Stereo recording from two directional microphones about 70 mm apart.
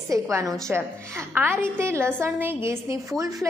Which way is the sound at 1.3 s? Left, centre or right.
Right.